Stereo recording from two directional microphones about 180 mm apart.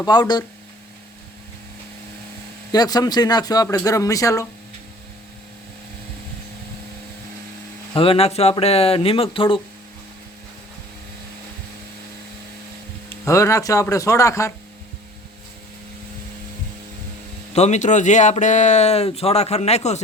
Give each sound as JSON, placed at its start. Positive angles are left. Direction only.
{"t": 0.0, "sound": "a man's voice", "side_deg": 25}
{"t": 2.7, "sound": "a man's voice", "side_deg": 20}
{"t": 7.9, "sound": "speech", "side_deg": 30}
{"t": 13.1, "sound": "speech", "side_deg": 15}
{"t": 17.5, "sound": "speech", "side_deg": 40}